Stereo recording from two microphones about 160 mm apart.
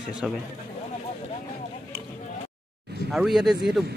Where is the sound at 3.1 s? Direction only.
Centre (ahead or behind).